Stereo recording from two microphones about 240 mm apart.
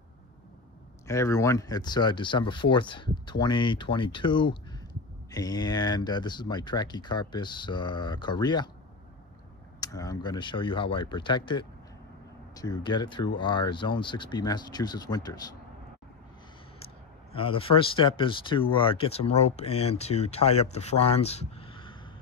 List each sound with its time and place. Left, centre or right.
1.0 s speech: centre
9.8 s a sound: centre
10.2 s speech: centre
17.4 s speech: left